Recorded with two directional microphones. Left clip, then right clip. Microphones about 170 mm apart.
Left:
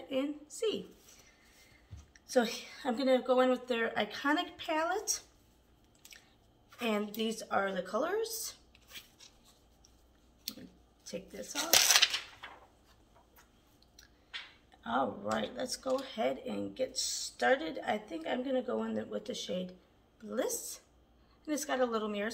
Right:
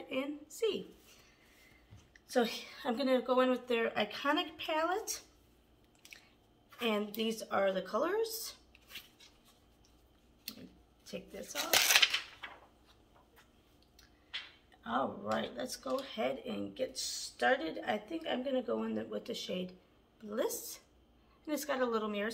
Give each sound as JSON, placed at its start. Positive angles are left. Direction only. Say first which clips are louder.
{"t": 0.1, "sound": "a sound", "louder": "left 3 dB", "side_deg": 0}
{"t": 2.1, "sound": "speech", "louder": "left 2 dB", "side_deg": 0}
{"t": 6.8, "sound": "a woman's voice", "louder": "even", "side_deg": 0}
{"t": 8.7, "sound": "a sound", "louder": "even", "side_deg": 10}
{"t": 11.1, "sound": "speech", "louder": "left 2 dB", "side_deg": 0}
{"t": 11.5, "sound": "dishes", "louder": "left 2 dB", "side_deg": 25}
{"t": 14.8, "sound": "speech", "louder": "left 2 dB", "side_deg": 10}